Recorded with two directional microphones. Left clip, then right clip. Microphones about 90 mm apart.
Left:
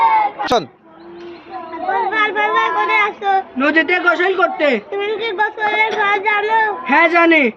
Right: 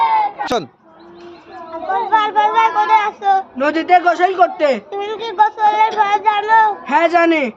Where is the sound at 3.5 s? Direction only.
55° right (ahead or behind).